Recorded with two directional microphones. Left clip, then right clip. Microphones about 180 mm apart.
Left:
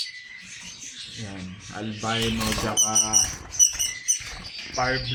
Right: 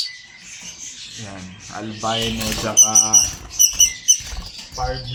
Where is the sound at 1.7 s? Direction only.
20° left (ahead or behind).